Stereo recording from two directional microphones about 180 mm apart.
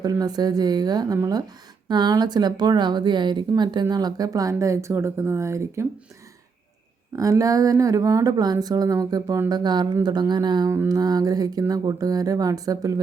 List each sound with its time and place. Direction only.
0.0 s speech: 20° right (ahead or behind)
7.2 s speech: 20° right (ahead or behind)